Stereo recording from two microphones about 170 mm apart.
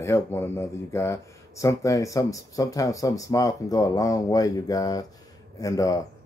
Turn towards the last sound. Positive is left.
turn(degrees=20)  # may be behind; listen again after turning